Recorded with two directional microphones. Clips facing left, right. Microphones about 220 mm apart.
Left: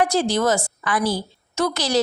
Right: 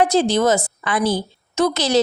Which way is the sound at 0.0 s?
20° right (ahead or behind).